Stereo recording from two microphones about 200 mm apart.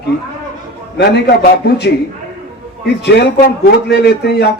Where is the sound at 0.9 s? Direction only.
55° left (ahead or behind).